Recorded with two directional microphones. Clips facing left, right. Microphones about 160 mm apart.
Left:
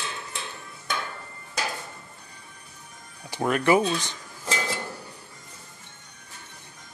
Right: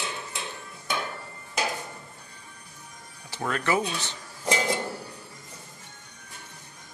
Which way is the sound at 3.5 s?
20° left (ahead or behind).